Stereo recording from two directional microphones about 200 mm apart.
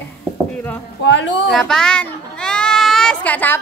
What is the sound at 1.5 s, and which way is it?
A child's voice, centre (ahead or behind).